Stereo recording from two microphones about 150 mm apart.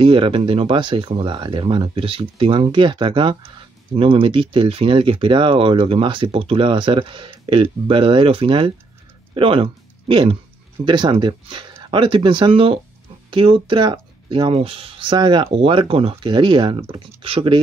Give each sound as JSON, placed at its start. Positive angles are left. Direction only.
{"t": 0.0, "sound": "speech", "side_deg": -35}